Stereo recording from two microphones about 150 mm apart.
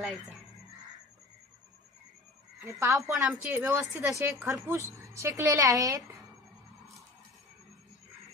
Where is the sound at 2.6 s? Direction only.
20° right (ahead or behind).